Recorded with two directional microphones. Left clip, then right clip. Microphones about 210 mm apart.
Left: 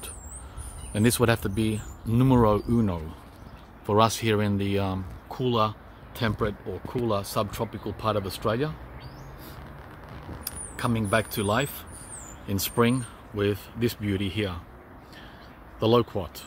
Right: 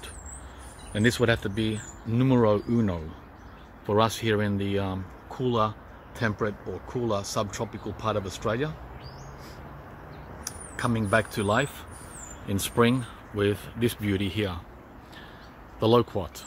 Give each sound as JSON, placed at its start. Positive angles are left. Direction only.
{"t": 0.9, "sound": "speech", "side_deg": 10}
{"t": 10.8, "sound": "speech", "side_deg": 5}
{"t": 15.8, "sound": "speech", "side_deg": 0}